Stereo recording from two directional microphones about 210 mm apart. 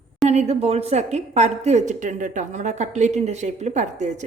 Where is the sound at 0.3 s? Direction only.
30° right (ahead or behind).